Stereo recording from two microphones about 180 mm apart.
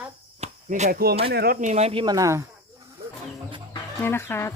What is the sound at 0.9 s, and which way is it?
Speech, 60° right (ahead or behind).